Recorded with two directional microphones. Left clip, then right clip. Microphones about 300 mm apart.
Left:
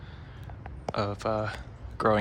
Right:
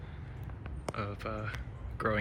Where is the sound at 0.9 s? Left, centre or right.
Centre.